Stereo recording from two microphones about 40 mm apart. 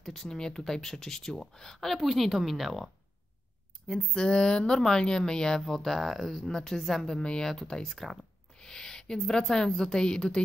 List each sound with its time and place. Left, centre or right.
0.0 s speech: centre
3.8 s speech: centre
5.6 s speech: centre
7.2 s speech: left
7.8 s speech: centre
8.5 s a sound: centre
9.3 s speech: centre